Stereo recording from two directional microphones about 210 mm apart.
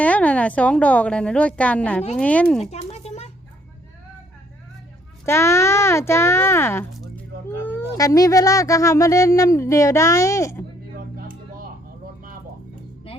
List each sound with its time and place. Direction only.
0.0 s speech: 5° left (ahead or behind)
2.6 s a sound: 30° left (ahead or behind)
5.2 s speech: 10° left (ahead or behind)
10.9 s music: 45° right (ahead or behind)